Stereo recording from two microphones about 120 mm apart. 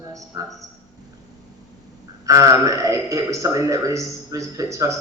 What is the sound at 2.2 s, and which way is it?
A man's voice, 25° right (ahead or behind).